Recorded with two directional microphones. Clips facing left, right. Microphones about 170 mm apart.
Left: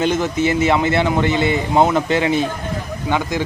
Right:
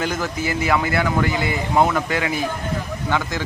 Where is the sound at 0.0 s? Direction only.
20° left (ahead or behind).